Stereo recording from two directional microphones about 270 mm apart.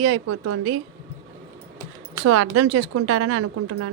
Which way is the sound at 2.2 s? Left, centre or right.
Right.